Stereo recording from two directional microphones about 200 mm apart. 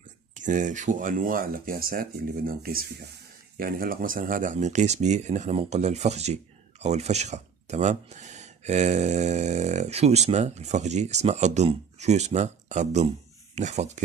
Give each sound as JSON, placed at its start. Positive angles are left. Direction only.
{"t": 0.3, "sound": "speech", "side_deg": -40}